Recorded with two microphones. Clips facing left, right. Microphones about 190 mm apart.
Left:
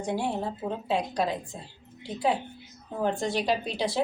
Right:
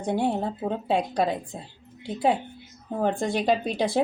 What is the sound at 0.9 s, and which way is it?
Speech, 55° right (ahead or behind).